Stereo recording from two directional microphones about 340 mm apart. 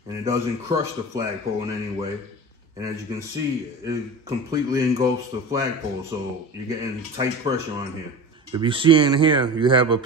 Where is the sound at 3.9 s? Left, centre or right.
Centre.